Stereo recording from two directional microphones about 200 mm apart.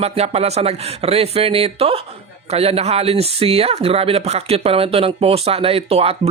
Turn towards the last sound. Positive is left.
turn(degrees=-30)  # may be behind; listen again after turning